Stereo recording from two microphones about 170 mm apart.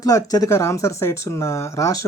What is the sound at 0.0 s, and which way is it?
Speech, 20° left (ahead or behind).